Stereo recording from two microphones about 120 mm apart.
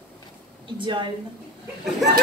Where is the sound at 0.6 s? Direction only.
45° right (ahead or behind).